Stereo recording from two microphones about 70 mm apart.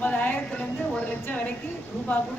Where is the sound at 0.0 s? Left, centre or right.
Left.